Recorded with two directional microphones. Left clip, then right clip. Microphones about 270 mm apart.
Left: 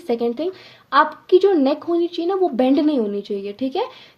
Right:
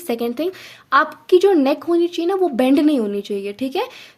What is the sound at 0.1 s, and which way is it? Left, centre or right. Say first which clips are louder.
Speech: even; right.